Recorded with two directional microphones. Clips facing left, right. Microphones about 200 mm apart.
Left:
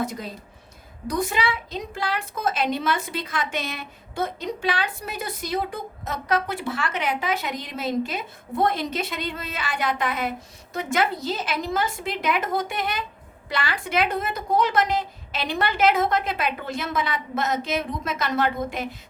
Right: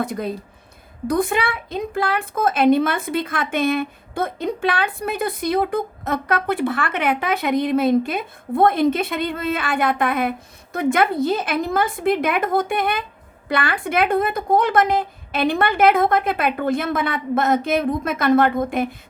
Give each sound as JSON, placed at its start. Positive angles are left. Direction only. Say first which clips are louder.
{"t": 0.0, "sound": "a woman's voice", "louder": "right 5 dB", "side_deg": -55}